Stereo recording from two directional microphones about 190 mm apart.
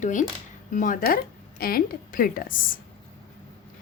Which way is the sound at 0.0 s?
40° left (ahead or behind).